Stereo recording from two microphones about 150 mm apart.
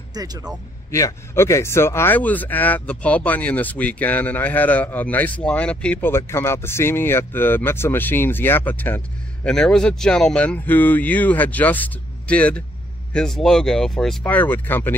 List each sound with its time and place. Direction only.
0.1 s speech: 25° right (ahead or behind)
0.9 s speech: 20° left (ahead or behind)